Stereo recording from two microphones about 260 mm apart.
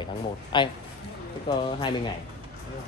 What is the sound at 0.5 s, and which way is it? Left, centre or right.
Speech, centre.